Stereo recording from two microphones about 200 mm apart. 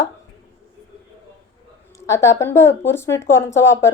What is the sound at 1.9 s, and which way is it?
A woman's voice, 15° left (ahead or behind).